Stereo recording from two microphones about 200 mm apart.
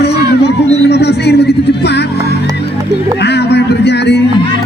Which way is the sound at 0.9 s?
55° left (ahead or behind).